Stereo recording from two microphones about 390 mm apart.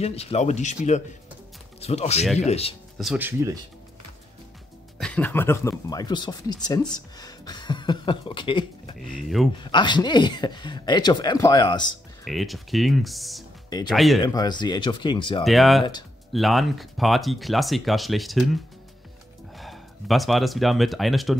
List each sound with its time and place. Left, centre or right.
0.0 s speech: centre
3.0 s speech: centre
4.9 s speech: centre
12.3 s speech: centre
14.2 s speech: centre
15.4 s speech: centre